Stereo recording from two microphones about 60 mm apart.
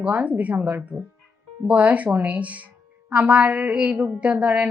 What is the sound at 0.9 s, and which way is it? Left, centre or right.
Speech, right.